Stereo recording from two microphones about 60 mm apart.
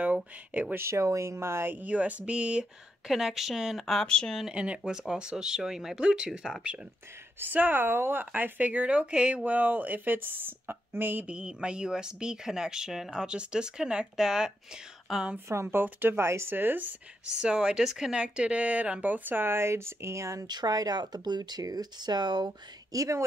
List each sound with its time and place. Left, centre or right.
0.0 s speech: right
0.7 s speech: right
1.8 s speech: right
3.1 s speech: centre
4.1 s speech: centre
4.5 s speech: centre
7.3 s speech: right
11.2 s speech: centre
15.4 s speech: right
16.2 s speech: right
17.3 s speech: centre; by 21.8 s right
22.9 s a woman's voice: right